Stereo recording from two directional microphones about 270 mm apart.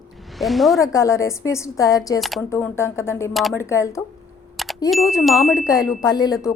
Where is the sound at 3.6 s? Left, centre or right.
Centre.